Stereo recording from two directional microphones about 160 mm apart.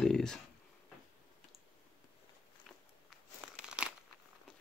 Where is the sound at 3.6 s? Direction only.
5° right (ahead or behind).